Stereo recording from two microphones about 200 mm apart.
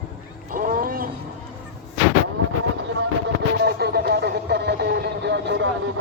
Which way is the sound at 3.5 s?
55° right (ahead or behind).